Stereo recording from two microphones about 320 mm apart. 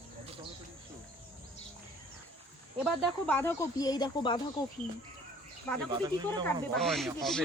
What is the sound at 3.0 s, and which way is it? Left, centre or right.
Speech, centre.